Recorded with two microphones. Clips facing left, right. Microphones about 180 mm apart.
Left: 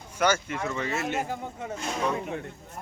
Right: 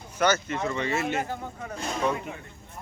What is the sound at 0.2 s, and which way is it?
Speech, 10° left (ahead or behind).